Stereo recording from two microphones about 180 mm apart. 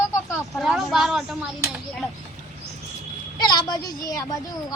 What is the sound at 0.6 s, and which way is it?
Speech, centre (ahead or behind).